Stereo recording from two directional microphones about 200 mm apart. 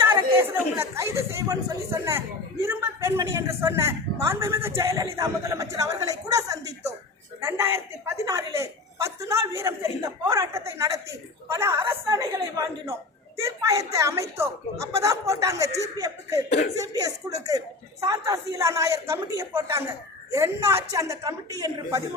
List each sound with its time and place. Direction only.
0.1 s a woman's voice: 10° right (ahead or behind)